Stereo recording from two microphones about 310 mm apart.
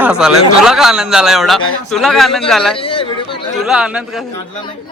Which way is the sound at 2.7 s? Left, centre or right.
Centre.